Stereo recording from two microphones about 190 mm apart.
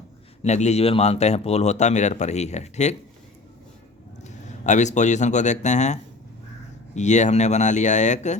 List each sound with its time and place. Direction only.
0.4 s speech: 35° left (ahead or behind)
4.2 s speech: 40° left (ahead or behind)